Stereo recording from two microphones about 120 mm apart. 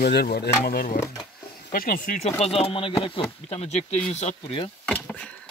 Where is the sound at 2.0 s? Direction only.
70° left (ahead or behind).